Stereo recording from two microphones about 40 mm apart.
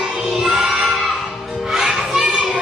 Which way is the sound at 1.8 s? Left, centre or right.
Centre.